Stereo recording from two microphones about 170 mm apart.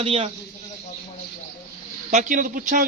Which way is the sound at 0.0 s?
35° right (ahead or behind).